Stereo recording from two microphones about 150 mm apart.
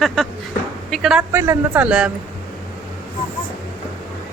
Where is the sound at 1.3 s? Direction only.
15° right (ahead or behind).